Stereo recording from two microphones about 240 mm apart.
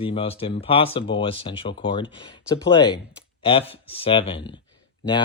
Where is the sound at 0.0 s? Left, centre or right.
Left.